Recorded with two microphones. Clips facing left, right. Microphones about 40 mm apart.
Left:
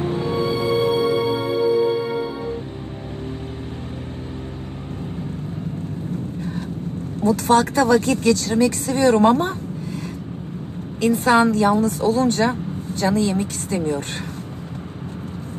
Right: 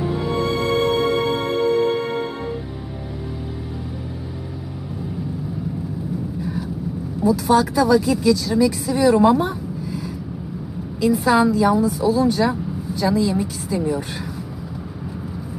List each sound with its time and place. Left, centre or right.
0.0 s music: left
0.5 s music: right
7.2 s speech: left
11.2 s a woman's voice: left